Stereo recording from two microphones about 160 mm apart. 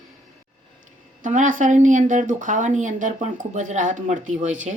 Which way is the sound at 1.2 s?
55° right (ahead or behind).